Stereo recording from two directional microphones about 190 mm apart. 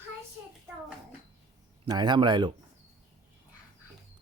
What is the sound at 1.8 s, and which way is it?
Speech, 20° right (ahead or behind).